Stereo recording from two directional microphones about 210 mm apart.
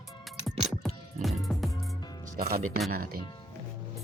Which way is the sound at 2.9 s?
45° right (ahead or behind).